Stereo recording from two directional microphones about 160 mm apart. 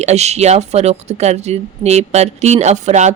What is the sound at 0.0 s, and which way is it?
Speech, 45° right (ahead or behind).